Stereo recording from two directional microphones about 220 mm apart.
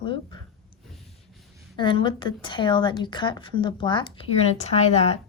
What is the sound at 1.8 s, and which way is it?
A woman's voice, 20° left (ahead or behind).